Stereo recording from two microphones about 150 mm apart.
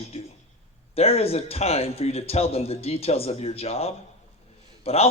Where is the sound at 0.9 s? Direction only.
40° left (ahead or behind).